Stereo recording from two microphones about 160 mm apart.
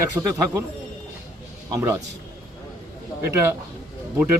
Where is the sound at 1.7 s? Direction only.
20° right (ahead or behind).